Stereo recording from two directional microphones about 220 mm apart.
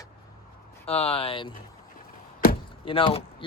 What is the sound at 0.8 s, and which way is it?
Speech, 25° left (ahead or behind).